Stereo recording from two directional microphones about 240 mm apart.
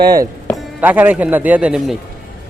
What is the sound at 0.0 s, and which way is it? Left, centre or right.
A man's voice, centre.